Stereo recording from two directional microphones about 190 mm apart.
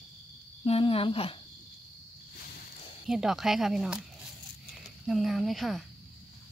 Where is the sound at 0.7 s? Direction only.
30° left (ahead or behind).